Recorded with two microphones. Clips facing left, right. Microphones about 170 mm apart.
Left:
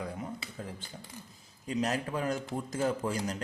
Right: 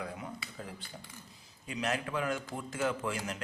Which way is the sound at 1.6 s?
40° left (ahead or behind).